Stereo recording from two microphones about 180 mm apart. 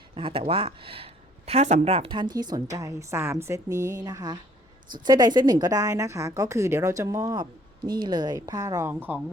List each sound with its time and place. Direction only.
0.1 s a woman's voice: 30° right (ahead or behind); by 9.2 s 10° right (ahead or behind)